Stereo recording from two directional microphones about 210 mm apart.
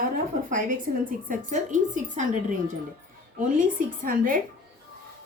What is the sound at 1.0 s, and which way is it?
A woman's voice, 40° right (ahead or behind).